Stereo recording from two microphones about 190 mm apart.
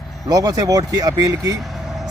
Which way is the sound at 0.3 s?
20° right (ahead or behind).